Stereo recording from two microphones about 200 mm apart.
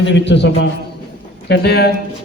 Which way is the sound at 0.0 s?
60° left (ahead or behind).